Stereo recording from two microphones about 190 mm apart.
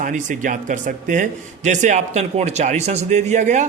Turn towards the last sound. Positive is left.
turn(degrees=-40)  # may be behind; listen again after turning